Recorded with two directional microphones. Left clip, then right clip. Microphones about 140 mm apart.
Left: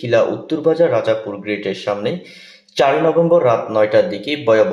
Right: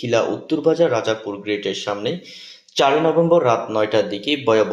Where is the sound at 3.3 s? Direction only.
25° right (ahead or behind).